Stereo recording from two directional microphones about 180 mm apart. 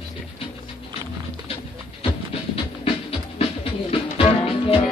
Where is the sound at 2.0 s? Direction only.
30° left (ahead or behind).